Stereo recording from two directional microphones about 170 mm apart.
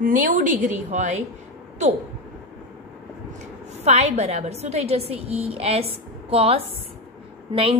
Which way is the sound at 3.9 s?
40° right (ahead or behind).